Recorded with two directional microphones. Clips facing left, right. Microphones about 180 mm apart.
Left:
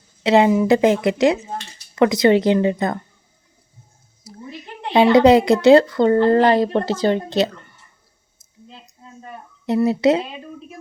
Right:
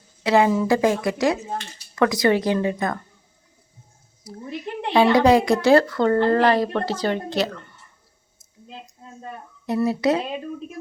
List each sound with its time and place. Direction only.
0.2 s speech: 20° left (ahead or behind)
4.9 s speech: 20° left (ahead or behind)
9.6 s speech: 25° left (ahead or behind)